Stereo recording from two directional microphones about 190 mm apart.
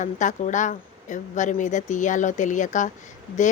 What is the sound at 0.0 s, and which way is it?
Speech, 40° left (ahead or behind).